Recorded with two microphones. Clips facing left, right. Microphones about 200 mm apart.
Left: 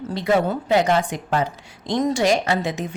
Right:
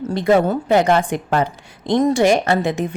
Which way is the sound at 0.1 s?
50° right (ahead or behind).